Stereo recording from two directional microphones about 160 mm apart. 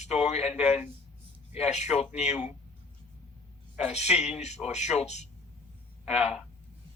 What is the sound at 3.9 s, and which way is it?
Speech, 45° left (ahead or behind).